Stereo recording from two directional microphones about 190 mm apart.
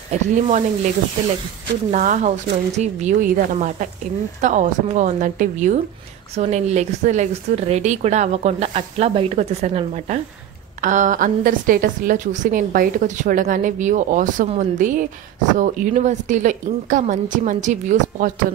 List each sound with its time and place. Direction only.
0.1 s speech: 40° right (ahead or behind)
1.9 s a woman's voice: 40° right (ahead or behind)